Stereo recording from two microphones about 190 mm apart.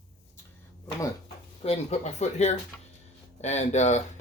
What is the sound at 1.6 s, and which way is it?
Speech, 35° left (ahead or behind).